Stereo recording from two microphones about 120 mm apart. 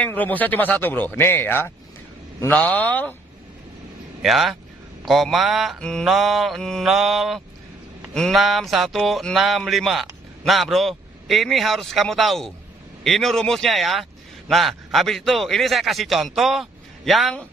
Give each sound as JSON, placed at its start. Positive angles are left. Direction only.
{"t": 0.0, "sound": "speech", "side_deg": 15}
{"t": 4.2, "sound": "speech", "side_deg": 0}